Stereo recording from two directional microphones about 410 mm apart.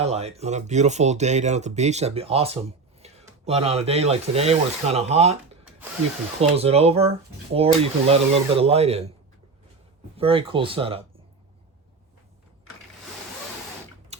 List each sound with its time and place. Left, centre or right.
0.0 s speech: centre
6.6 s speech: centre
10.2 s speech: centre
14.1 s a sound: centre